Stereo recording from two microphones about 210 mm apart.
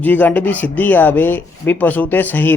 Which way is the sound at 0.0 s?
10° left (ahead or behind).